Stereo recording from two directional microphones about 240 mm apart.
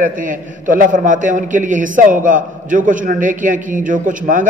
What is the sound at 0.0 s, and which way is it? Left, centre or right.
A man's voice, right.